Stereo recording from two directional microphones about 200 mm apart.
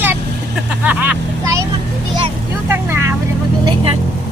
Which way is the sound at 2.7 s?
10° right (ahead or behind).